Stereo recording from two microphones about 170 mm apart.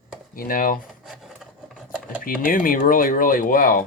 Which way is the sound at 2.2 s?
55° left (ahead or behind).